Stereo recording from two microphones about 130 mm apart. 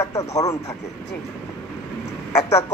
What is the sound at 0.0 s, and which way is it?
Radio, 25° left (ahead or behind).